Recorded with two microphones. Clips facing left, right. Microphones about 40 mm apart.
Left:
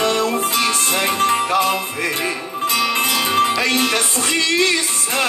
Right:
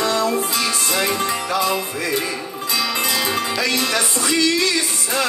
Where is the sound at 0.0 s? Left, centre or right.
Left.